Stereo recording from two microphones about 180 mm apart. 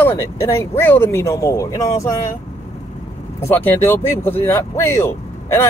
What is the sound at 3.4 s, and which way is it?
Speech, 10° left (ahead or behind).